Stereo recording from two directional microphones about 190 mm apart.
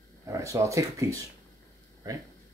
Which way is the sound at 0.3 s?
15° right (ahead or behind).